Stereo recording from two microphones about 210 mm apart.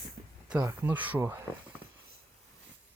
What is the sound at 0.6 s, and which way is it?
Speech, 10° right (ahead or behind).